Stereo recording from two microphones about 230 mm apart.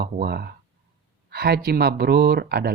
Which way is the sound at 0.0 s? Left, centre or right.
Right.